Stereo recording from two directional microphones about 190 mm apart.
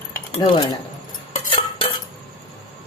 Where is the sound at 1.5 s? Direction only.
30° left (ahead or behind).